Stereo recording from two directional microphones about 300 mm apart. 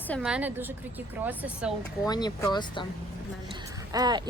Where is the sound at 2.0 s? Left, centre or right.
Centre.